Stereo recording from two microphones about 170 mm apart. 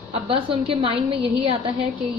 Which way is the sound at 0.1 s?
35° right (ahead or behind).